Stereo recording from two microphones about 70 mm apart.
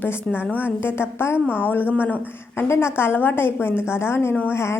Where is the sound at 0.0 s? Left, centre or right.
Left.